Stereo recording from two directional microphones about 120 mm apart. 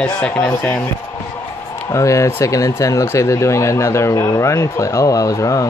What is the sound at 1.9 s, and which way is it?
Speech, 25° left (ahead or behind).